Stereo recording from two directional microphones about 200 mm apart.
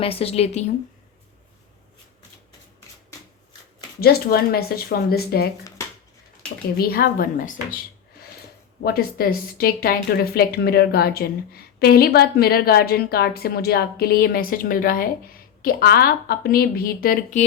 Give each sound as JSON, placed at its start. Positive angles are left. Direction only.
{"t": 0.0, "sound": "speech", "side_deg": 30}
{"t": 4.0, "sound": "a woman's voice", "side_deg": 50}
{"t": 6.7, "sound": "a woman's voice", "side_deg": 50}
{"t": 8.8, "sound": "a woman's voice", "side_deg": 50}